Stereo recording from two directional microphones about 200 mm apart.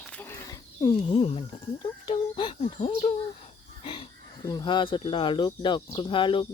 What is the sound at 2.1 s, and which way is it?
Speech, 25° left (ahead or behind).